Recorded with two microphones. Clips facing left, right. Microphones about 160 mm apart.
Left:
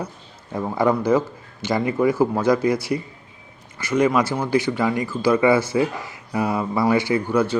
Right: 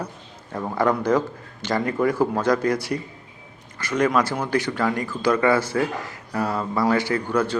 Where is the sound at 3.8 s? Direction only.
10° left (ahead or behind).